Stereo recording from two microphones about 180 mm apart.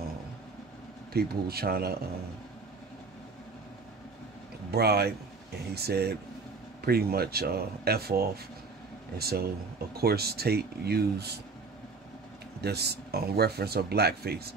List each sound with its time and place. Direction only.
1.1 s speech: 60° right (ahead or behind)
4.6 s speech: 60° right (ahead or behind)
12.6 s speech: 65° right (ahead or behind)